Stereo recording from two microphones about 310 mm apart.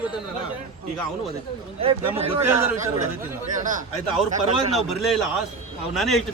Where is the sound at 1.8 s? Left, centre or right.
Centre.